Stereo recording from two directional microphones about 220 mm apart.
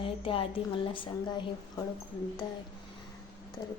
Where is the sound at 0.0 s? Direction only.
25° left (ahead or behind).